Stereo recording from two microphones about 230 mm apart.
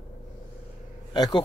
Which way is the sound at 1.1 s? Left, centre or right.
Centre.